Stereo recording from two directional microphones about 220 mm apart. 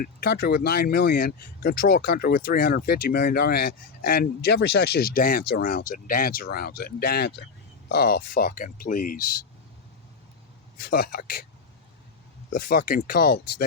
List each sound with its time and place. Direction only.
0.0 s speech: 40° left (ahead or behind)
10.8 s speech: 40° left (ahead or behind)
12.5 s speech: 40° left (ahead or behind)